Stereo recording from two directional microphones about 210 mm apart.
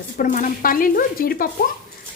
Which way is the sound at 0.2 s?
40° left (ahead or behind).